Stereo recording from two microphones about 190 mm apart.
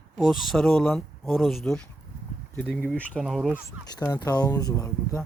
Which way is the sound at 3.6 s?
20° left (ahead or behind).